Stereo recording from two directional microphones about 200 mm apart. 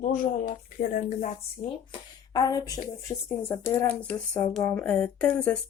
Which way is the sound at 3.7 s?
10° left (ahead or behind).